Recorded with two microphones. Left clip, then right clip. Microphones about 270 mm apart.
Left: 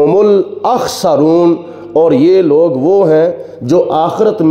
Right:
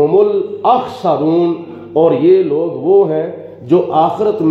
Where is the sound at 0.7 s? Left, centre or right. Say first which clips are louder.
Even; left.